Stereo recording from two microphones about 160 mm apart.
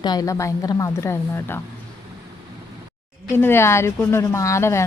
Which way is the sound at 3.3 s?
15° left (ahead or behind).